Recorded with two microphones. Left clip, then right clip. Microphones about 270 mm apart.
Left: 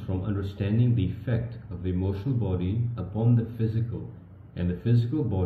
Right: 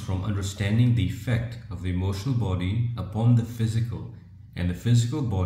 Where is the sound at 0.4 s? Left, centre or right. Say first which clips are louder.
Right 4 dB; right.